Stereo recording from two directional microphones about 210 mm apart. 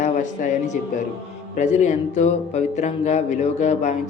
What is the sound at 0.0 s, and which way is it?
Speech, 35° left (ahead or behind).